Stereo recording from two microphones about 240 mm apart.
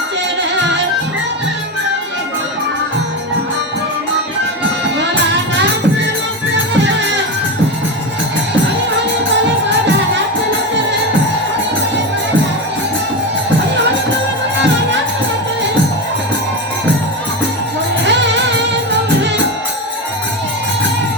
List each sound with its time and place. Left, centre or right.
18.0 s music: right